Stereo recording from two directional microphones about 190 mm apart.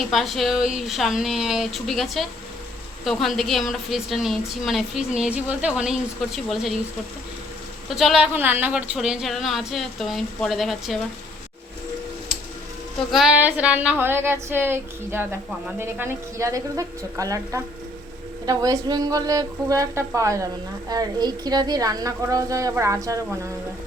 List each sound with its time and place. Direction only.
0.0 s a woman's voice: centre (ahead or behind)
7.9 s a woman's voice: centre (ahead or behind)
12.3 s music: centre (ahead or behind)
13.1 s a woman's voice: centre (ahead or behind)